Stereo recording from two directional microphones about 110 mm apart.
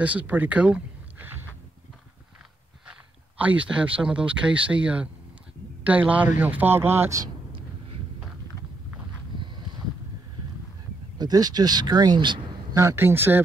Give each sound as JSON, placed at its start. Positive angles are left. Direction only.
{"t": 0.0, "sound": "speech", "side_deg": -15}
{"t": 2.9, "sound": "speech", "side_deg": -15}
{"t": 11.1, "sound": "speech", "side_deg": -35}
{"t": 12.7, "sound": "speech", "side_deg": -25}